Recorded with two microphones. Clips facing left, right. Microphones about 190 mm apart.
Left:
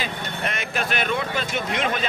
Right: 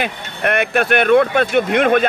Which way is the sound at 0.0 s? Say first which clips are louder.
Right 7 dB; 60° right (ahead or behind).